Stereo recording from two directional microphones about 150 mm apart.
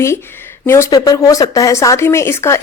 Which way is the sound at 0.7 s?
20° left (ahead or behind).